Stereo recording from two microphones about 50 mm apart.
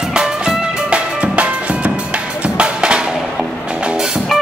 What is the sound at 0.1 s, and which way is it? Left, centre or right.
Music, centre.